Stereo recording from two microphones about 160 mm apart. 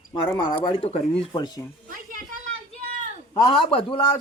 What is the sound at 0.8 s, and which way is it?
Speech, 40° left (ahead or behind).